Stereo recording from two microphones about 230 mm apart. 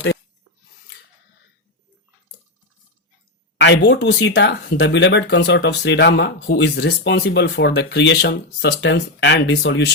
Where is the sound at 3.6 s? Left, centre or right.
Left.